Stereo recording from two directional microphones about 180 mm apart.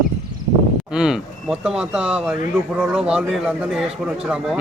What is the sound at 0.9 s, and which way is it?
A man's voice, 5° right (ahead or behind).